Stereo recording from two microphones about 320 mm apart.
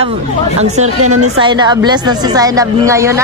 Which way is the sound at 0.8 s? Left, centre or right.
Right.